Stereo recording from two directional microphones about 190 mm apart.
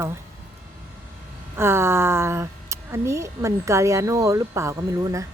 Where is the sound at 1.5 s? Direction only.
15° right (ahead or behind).